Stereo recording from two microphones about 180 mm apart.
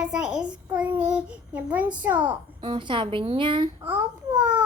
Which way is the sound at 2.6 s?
25° right (ahead or behind).